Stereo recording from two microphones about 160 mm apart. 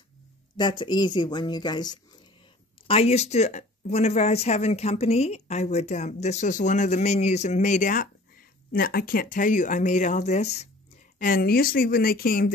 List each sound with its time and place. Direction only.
0.6 s speech: 30° left (ahead or behind)
2.9 s speech: 40° left (ahead or behind); by 8.1 s 55° left (ahead or behind)
8.7 s speech: 65° left (ahead or behind); by 10.7 s 40° left (ahead or behind)
11.1 s speech: 60° left (ahead or behind)